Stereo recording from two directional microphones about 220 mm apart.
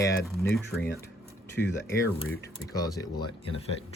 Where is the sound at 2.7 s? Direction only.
15° left (ahead or behind).